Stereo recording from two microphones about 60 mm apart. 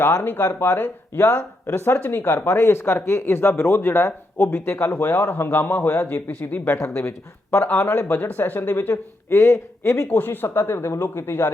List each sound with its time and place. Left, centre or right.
0.0 s speech: left
6.7 s speech: left
7.5 s speech: left
10.1 s speech: left